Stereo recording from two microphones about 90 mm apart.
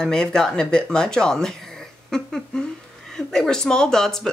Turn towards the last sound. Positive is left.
turn(degrees=5)  # may be behind; listen again after turning